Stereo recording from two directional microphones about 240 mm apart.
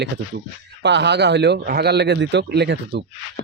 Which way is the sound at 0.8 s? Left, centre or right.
Right.